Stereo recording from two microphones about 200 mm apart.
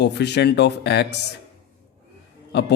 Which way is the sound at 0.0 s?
55° left (ahead or behind).